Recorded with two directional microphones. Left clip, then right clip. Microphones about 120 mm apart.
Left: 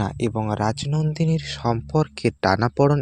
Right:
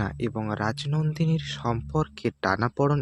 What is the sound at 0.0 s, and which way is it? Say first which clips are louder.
Speech: left 5 dB; 35° left (ahead or behind).